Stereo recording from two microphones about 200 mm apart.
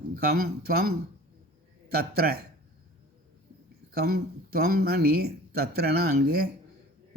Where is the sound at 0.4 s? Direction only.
50° right (ahead or behind).